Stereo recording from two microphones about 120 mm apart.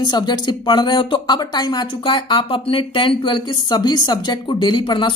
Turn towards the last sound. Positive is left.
turn(degrees=40)  # may be behind; listen again after turning